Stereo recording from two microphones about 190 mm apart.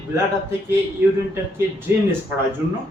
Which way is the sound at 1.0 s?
10° right (ahead or behind).